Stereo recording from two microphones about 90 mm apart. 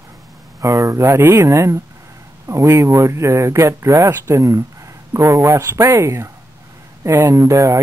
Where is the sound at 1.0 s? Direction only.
25° right (ahead or behind).